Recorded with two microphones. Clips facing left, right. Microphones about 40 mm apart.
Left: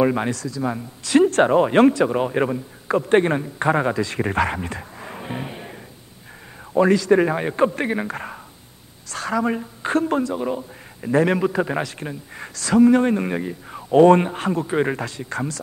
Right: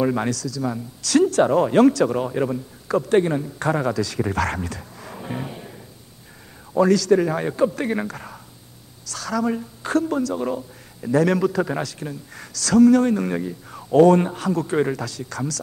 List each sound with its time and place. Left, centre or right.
0.0 s speech: left
4.5 s music: left
6.8 s a woman's voice: left